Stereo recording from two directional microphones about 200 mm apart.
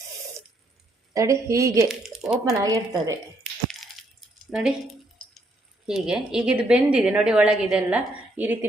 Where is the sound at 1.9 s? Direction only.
5° right (ahead or behind).